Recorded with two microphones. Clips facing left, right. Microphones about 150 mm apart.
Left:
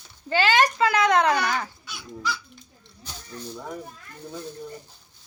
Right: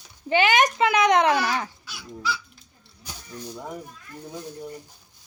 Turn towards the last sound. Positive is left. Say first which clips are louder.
# even
turn(degrees=-10)  # may be behind; listen again after turning